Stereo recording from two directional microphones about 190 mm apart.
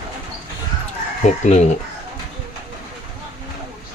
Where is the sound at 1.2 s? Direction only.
35° left (ahead or behind).